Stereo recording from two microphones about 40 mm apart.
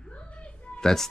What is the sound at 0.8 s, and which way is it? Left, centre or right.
Speech, centre.